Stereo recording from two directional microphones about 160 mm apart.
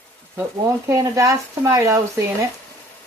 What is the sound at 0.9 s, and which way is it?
Speech, 20° right (ahead or behind).